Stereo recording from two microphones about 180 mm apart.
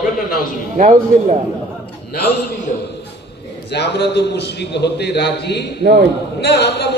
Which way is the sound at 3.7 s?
70° left (ahead or behind).